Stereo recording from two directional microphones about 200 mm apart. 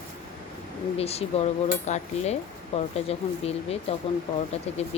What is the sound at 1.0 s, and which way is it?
Speech, 30° left (ahead or behind).